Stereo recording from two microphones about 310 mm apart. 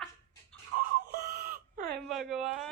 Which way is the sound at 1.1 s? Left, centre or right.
Right.